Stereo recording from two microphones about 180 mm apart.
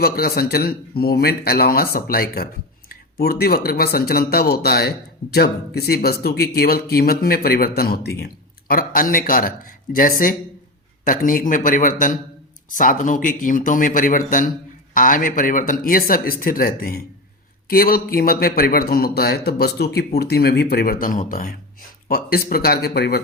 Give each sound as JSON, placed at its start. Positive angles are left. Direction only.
{"t": 0.0, "sound": "speech", "side_deg": 60}